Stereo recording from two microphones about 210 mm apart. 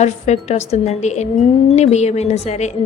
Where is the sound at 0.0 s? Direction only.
30° left (ahead or behind).